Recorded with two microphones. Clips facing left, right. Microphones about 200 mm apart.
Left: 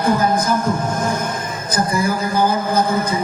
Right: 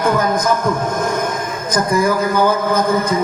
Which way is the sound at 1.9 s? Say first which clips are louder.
Right 5 dB; 55° right (ahead or behind).